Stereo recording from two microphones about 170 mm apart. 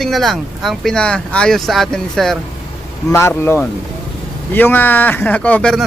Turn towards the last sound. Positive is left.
turn(degrees=5)  # may be behind; listen again after turning